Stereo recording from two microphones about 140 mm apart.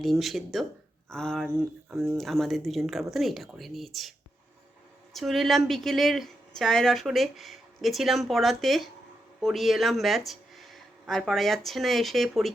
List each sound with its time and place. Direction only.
0.0 s speech: centre (ahead or behind)
1.9 s speech: 15° right (ahead or behind)
2.1 s speech: centre (ahead or behind)
5.1 s speech: centre (ahead or behind)